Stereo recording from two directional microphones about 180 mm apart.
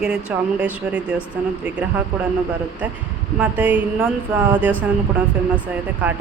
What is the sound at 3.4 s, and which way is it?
Speech, 10° right (ahead or behind).